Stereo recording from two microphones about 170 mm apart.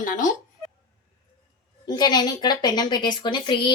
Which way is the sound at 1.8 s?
25° left (ahead or behind).